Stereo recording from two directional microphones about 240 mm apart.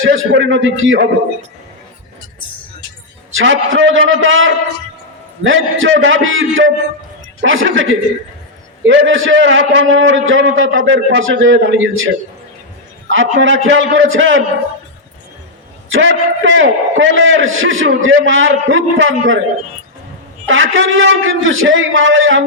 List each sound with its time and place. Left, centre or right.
0.0 s a man's voice: right
3.3 s a man's voice: right
13.1 s a man's voice: right
15.9 s a man's voice: right
20.5 s a man's voice: right